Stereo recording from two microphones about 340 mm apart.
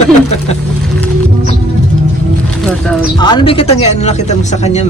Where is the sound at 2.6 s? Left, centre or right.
Centre.